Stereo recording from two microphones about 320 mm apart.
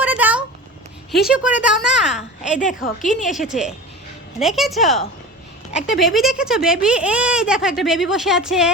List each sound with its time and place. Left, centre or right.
0.0 s a sound: centre
1.1 s speech: centre
2.5 s a woman's voice: left
3.2 s speech: centre